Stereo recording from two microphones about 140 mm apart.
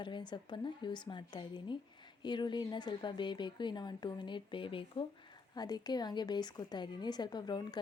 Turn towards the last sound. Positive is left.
turn(degrees=30)  # may be behind; listen again after turning